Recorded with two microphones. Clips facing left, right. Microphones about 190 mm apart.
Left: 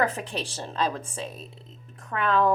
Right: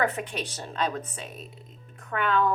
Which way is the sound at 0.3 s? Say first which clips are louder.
Left 1 dB; 30° left (ahead or behind).